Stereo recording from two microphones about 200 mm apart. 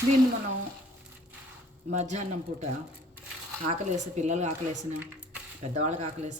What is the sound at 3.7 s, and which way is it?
Speech, 35° right (ahead or behind).